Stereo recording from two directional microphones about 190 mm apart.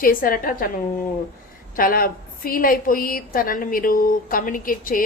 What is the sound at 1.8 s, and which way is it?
A woman's voice, 50° left (ahead or behind).